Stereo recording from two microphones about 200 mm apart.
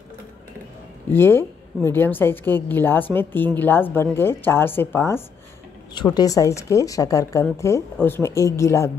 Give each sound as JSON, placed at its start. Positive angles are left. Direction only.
{"t": 1.1, "sound": "a woman's voice", "side_deg": 10}